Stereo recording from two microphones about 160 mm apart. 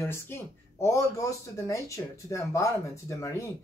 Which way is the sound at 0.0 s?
15° left (ahead or behind).